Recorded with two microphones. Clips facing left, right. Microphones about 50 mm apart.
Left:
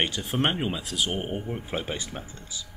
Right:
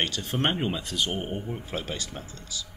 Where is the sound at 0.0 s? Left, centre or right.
Centre.